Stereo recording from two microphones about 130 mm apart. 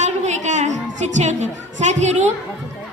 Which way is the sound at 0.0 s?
65° right (ahead or behind).